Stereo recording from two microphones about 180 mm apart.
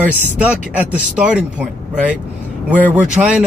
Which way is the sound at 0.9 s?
5° right (ahead or behind).